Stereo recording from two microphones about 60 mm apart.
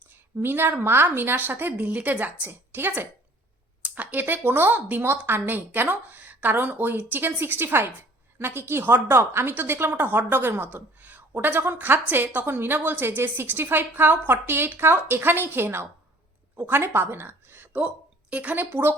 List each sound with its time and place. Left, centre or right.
0.1 s a woman's voice: right
1.7 s a woman's voice: right
17.7 s speech: right